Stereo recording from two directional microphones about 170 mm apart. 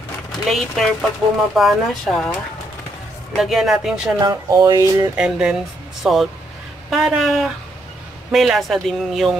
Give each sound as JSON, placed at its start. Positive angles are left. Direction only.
{"t": 0.5, "sound": "speech", "side_deg": 0}
{"t": 3.3, "sound": "speech", "side_deg": 0}
{"t": 4.2, "sound": "speech", "side_deg": -20}
{"t": 5.1, "sound": "speech", "side_deg": -5}